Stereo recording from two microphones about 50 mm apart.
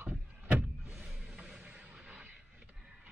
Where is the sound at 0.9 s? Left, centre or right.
Centre.